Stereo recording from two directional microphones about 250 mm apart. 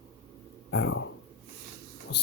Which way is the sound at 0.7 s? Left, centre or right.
Left.